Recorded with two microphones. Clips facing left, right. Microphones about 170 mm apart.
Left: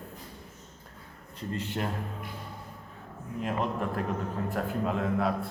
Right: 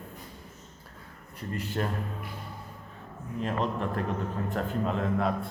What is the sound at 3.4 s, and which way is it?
A man's voice, 10° left (ahead or behind).